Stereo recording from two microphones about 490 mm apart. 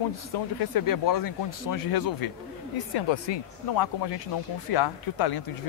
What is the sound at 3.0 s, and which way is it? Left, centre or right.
Speech, left.